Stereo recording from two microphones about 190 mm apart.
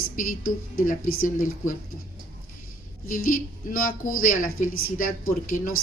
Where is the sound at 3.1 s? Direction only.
50° left (ahead or behind).